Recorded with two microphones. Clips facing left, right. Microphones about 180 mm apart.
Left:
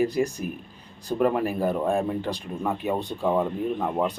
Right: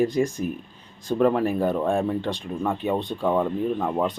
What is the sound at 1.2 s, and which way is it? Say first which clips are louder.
Speech: right 3 dB; 5° left (ahead or behind).